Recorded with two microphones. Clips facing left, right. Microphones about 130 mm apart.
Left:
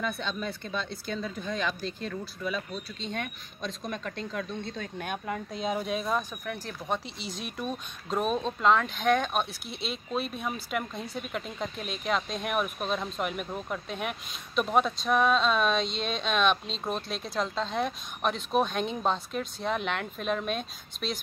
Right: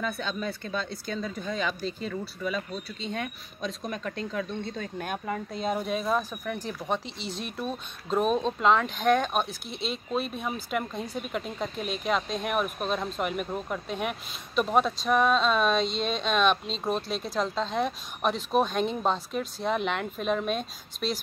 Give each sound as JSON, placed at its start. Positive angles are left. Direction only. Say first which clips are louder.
{"t": 0.0, "sound": "speech", "louder": "right 1 dB", "side_deg": -5}
{"t": 7.5, "sound": "speech", "louder": "right 1 dB", "side_deg": 0}